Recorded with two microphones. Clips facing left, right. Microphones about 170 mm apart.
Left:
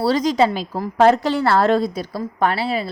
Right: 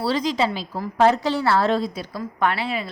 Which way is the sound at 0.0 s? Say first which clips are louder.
Left 5 dB; 45° left (ahead or behind).